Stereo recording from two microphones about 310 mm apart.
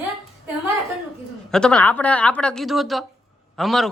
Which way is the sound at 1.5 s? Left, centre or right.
Centre.